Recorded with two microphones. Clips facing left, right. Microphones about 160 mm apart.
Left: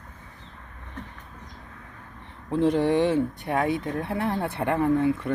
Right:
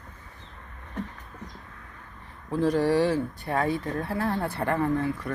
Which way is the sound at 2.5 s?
25° left (ahead or behind).